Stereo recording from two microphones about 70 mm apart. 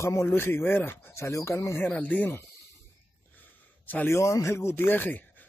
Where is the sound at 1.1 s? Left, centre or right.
Left.